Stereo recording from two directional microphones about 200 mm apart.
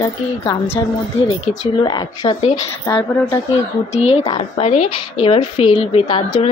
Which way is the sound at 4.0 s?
30° left (ahead or behind).